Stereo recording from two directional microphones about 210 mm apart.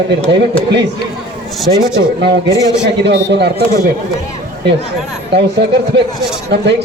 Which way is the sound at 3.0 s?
55° right (ahead or behind).